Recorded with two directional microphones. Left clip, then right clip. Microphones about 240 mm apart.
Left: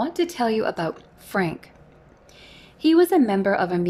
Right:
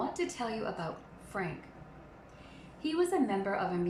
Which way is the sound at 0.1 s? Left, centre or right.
Left.